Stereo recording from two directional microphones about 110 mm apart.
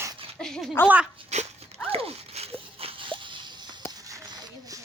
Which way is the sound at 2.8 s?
55° right (ahead or behind).